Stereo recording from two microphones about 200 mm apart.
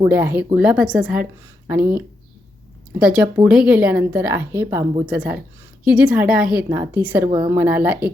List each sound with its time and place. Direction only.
0.0 s a woman's voice: 10° right (ahead or behind)
7.3 s speech: 25° right (ahead or behind)
7.5 s a woman's voice: 10° right (ahead or behind)